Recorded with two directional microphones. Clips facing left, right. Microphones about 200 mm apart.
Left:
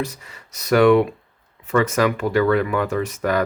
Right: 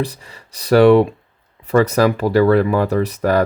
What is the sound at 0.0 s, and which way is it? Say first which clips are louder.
Speech: right 4 dB; 35° right (ahead or behind).